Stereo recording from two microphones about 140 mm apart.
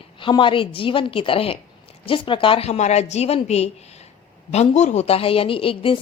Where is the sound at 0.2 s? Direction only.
35° left (ahead or behind).